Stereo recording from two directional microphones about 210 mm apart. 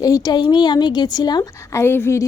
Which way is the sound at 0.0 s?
15° left (ahead or behind).